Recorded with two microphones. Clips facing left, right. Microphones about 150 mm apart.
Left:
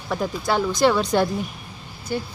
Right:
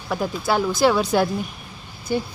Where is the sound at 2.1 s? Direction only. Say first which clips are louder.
Right 3 dB; 15° right (ahead or behind).